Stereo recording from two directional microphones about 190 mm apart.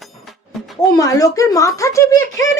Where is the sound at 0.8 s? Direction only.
20° left (ahead or behind).